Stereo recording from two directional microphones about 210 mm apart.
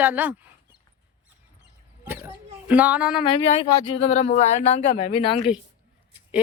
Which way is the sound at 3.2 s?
25° left (ahead or behind).